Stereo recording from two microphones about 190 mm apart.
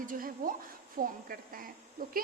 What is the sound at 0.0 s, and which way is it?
A woman's voice, 45° right (ahead or behind).